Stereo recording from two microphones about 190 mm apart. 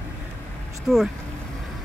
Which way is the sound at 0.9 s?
Centre (ahead or behind).